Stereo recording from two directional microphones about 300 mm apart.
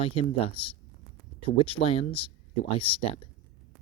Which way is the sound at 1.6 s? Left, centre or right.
Centre.